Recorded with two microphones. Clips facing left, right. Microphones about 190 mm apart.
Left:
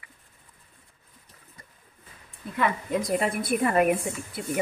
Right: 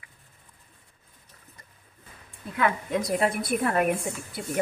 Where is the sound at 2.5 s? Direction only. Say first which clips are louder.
Even; centre (ahead or behind).